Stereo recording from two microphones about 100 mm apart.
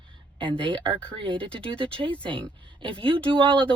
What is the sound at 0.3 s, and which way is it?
Speech, 60° right (ahead or behind).